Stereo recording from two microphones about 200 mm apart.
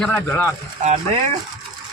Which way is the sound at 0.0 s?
5° left (ahead or behind).